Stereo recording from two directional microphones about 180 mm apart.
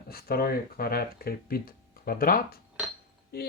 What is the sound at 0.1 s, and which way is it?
Speech, 55° left (ahead or behind).